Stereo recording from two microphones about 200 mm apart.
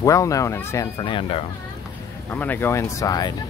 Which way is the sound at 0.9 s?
25° left (ahead or behind).